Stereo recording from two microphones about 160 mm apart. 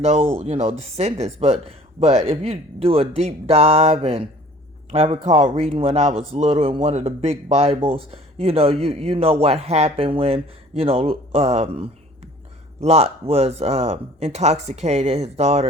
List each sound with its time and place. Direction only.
0.0 s speech: 40° right (ahead or behind)